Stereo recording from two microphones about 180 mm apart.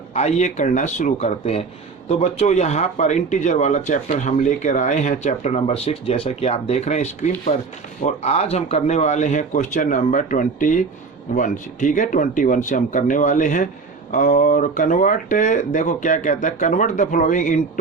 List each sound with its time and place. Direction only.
0.1 s speech: 40° left (ahead or behind)